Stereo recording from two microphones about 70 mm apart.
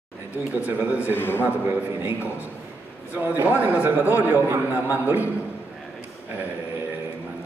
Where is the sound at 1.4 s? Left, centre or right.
Right.